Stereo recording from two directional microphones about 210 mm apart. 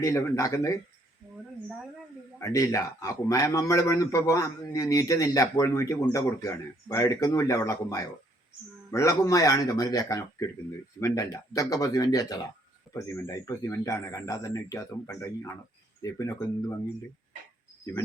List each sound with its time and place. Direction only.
0.0 s a man's voice: 15° left (ahead or behind)
2.4 s a man's voice: 15° left (ahead or behind)